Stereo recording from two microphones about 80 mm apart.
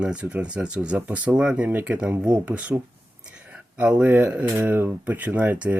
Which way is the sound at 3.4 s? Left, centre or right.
Centre.